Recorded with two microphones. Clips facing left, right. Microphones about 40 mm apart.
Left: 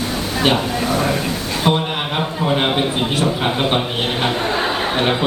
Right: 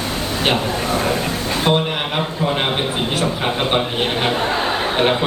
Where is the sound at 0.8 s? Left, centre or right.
Centre.